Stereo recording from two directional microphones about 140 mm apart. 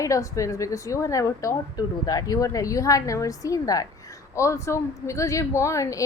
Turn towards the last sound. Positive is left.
turn(degrees=20)  # may be behind; listen again after turning